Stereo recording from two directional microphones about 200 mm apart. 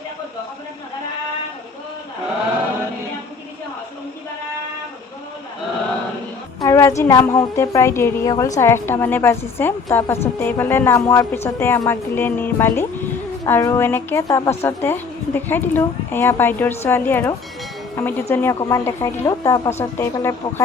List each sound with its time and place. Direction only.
6.6 s a woman's voice: 15° left (ahead or behind)